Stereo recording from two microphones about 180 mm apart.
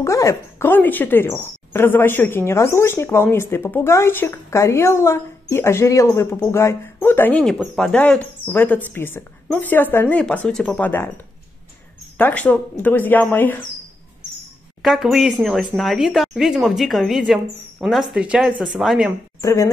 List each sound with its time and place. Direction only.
0.0 s speech: 15° left (ahead or behind)
12.2 s speech: 10° left (ahead or behind)
14.8 s speech: centre (ahead or behind)
19.4 s speech: 15° left (ahead or behind)